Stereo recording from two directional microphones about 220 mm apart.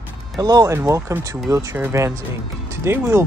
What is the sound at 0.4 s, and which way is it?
Speech, 15° right (ahead or behind).